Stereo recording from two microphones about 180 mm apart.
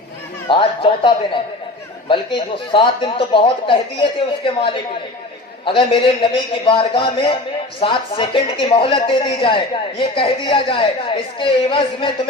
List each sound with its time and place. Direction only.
0.4 s speech: 30° left (ahead or behind)
5.6 s speech: 30° left (ahead or behind)